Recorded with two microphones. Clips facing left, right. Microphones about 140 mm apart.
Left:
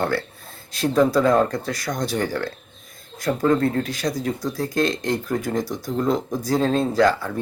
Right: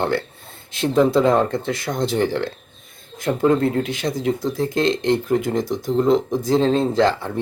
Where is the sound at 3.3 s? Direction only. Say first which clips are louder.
Right 2 dB; 20° right (ahead or behind).